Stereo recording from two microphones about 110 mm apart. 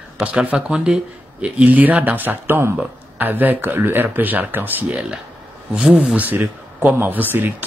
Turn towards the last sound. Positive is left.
turn(degrees=-15)  # may be behind; listen again after turning